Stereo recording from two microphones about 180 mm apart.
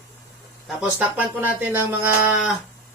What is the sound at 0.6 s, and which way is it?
Speech, 10° right (ahead or behind).